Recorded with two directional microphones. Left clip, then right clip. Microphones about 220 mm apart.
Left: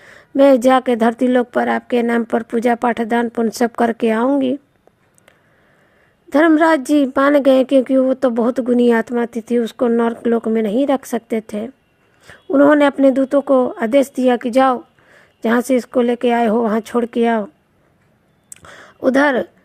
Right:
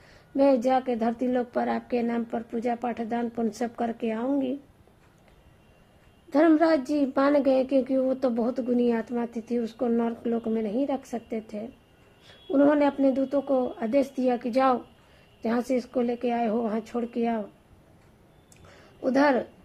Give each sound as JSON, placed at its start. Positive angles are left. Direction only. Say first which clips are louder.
{"t": 0.3, "sound": "a woman's voice", "louder": "left 11 dB", "side_deg": 40}
{"t": 6.3, "sound": "a woman's voice", "louder": "left 8 dB", "side_deg": 35}
{"t": 18.5, "sound": "a sound", "louder": "left 14 dB", "side_deg": 40}